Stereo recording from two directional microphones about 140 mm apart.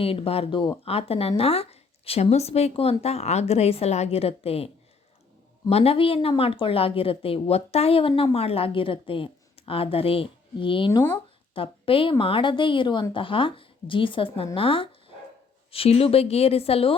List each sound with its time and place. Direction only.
0.0 s a woman's voice: 40° left (ahead or behind)